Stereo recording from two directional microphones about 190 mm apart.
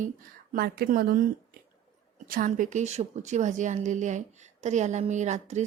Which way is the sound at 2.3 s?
45° right (ahead or behind).